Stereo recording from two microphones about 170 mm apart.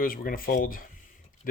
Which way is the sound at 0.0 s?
55° left (ahead or behind).